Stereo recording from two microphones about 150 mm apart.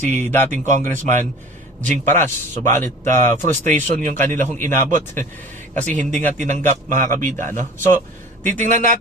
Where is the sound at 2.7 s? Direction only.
20° left (ahead or behind).